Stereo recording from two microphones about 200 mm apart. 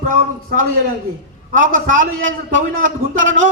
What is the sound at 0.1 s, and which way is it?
A man's voice, 40° right (ahead or behind).